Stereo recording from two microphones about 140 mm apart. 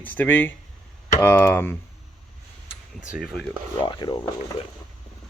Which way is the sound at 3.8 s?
35° left (ahead or behind).